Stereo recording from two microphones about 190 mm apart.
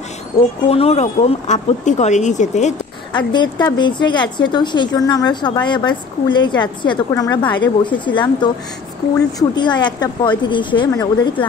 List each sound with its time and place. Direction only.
0.3 s speech: 35° left (ahead or behind)
3.2 s a woman's voice: 25° left (ahead or behind)